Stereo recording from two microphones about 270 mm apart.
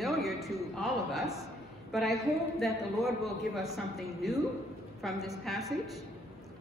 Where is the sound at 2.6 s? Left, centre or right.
Centre.